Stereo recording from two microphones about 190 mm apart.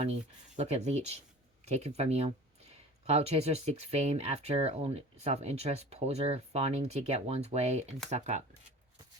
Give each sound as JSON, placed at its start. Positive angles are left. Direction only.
{"t": 0.0, "sound": "speech", "side_deg": -35}